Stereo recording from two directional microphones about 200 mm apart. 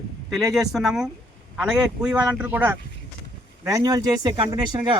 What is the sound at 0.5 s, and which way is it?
Speech, centre (ahead or behind).